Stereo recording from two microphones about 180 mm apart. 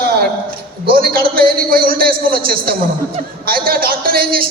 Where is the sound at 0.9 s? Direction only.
55° right (ahead or behind).